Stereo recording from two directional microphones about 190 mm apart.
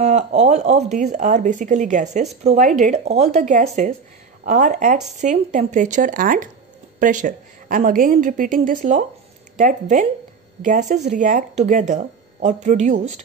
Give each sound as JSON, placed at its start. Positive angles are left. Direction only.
{"t": 0.0, "sound": "a woman's voice", "side_deg": -35}